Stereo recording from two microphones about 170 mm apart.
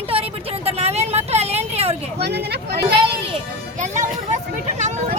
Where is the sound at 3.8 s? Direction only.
45° right (ahead or behind).